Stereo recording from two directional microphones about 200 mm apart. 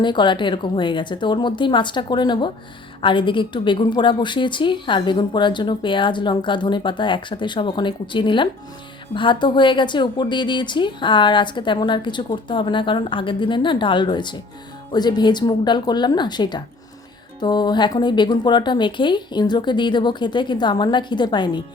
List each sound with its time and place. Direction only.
0.0 s a woman's voice: 25° left (ahead or behind)